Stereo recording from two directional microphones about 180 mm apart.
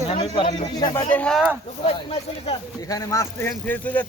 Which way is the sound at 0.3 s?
25° left (ahead or behind).